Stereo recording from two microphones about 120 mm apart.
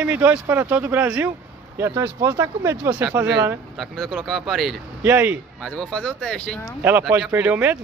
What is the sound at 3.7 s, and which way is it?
Speech, centre (ahead or behind).